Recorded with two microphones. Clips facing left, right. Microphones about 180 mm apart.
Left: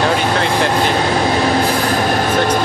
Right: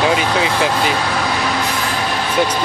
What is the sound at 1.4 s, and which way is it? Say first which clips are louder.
Vehicle: left 5 dB; 40° left (ahead or behind).